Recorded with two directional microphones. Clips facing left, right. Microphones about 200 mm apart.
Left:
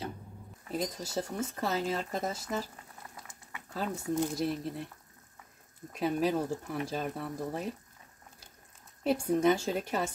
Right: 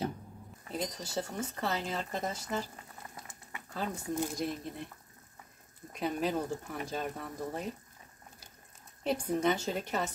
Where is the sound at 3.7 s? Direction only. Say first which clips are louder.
Left 3 dB; 5° left (ahead or behind).